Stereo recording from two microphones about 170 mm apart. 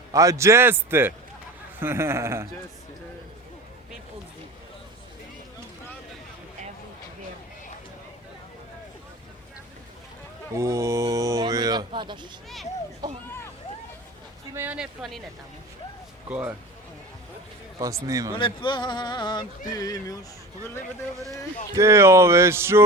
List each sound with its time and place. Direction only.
0.1 s speech: 20° right (ahead or behind)
10.5 s speech: 20° right (ahead or behind)
14.5 s speech: 10° right (ahead or behind)
16.3 s speech: 10° right (ahead or behind)
17.7 s speech: 20° right (ahead or behind)
18.3 s speech: 30° left (ahead or behind)
21.8 s speech: 15° right (ahead or behind)